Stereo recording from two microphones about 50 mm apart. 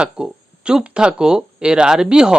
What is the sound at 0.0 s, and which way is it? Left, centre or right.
Speech, centre.